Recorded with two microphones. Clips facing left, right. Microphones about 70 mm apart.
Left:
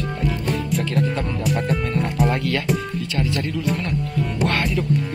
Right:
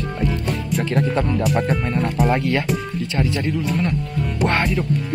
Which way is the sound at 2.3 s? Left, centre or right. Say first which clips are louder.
Right 3 dB; right.